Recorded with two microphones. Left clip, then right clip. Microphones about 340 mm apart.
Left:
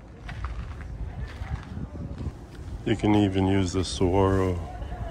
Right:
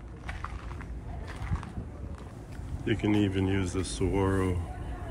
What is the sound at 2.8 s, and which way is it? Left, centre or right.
Speech, centre.